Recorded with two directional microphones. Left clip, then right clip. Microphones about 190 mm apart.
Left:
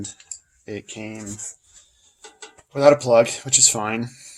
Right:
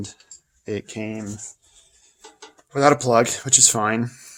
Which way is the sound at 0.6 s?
45° right (ahead or behind).